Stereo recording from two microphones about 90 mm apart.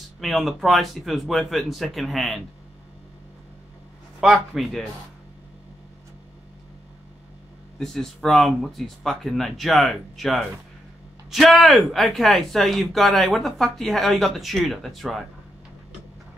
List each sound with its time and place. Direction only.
0.2 s speech: centre (ahead or behind)
4.2 s speech: centre (ahead or behind)
7.8 s speech: 5° left (ahead or behind)